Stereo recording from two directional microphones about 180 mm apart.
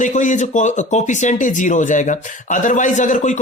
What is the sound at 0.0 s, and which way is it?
Speech, 45° left (ahead or behind).